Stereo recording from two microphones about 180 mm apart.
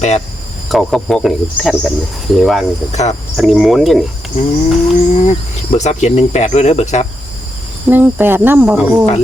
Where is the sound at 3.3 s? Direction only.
Centre (ahead or behind).